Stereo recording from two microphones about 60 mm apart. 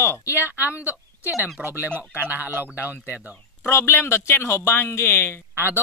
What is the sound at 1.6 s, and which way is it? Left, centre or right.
Speech, centre.